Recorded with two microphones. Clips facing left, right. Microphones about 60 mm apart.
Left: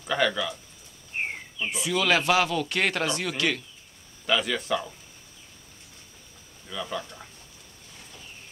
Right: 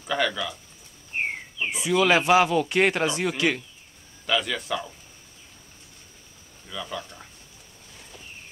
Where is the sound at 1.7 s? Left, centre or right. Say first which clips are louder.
Right 4 dB; centre.